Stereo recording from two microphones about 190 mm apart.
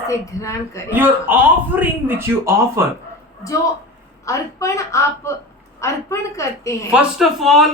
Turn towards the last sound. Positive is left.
turn(degrees=0)  # may be behind; listen again after turning